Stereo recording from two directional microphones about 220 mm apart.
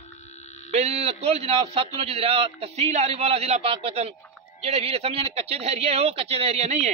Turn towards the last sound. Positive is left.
turn(degrees=-30)  # may be behind; listen again after turning